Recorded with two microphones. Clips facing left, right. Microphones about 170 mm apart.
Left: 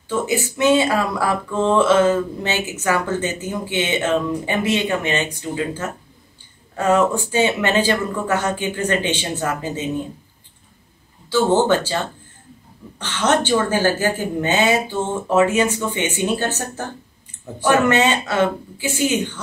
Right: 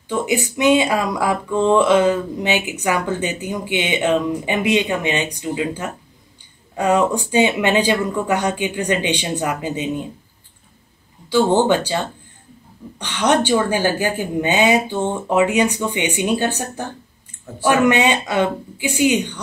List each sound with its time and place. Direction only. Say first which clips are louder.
0.1 s speech: right 1 dB; 15° right (ahead or behind)
11.2 s speech: right 1 dB; 15° right (ahead or behind)
13.0 s speech: right 1 dB; 15° right (ahead or behind)